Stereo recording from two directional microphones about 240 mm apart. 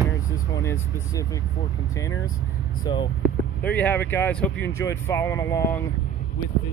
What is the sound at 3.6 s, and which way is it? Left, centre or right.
Speech, centre.